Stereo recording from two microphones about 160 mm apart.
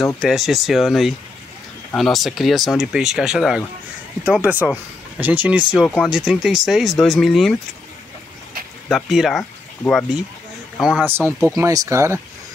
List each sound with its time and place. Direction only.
0.0 s speech: centre (ahead or behind)
5.7 s speech: centre (ahead or behind)
8.8 s speech: centre (ahead or behind)
10.8 s speech: 5° right (ahead or behind)